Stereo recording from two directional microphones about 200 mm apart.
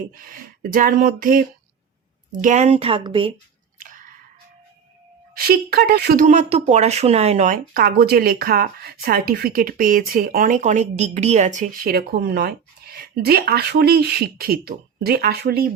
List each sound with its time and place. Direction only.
0.1 s a woman's voice: 45° right (ahead or behind); by 3.3 s 25° right (ahead or behind)
3.8 s chewing: 40° right (ahead or behind)
5.3 s a woman's voice: 50° right (ahead or behind)
6.2 s speech: 35° right (ahead or behind)
7.7 s a woman's voice: 50° right (ahead or behind)